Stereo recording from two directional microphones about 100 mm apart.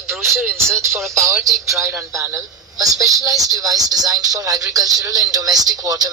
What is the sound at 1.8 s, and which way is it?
Speech, 30° right (ahead or behind).